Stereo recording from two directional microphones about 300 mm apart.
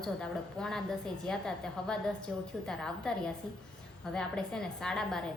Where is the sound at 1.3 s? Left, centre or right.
Centre.